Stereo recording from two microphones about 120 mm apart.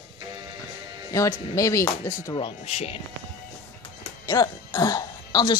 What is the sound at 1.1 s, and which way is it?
Speech, 25° left (ahead or behind).